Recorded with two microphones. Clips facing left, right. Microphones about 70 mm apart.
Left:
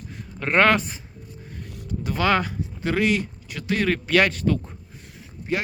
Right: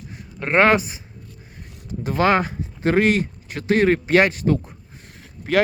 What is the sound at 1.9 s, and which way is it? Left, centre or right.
Speech, right.